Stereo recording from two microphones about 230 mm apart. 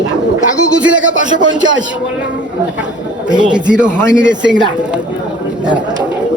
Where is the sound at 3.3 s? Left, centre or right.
Centre.